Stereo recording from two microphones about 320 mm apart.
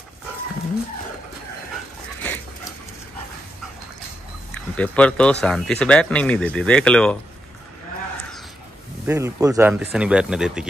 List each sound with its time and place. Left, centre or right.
4.6 s speech: centre
9.0 s speech: centre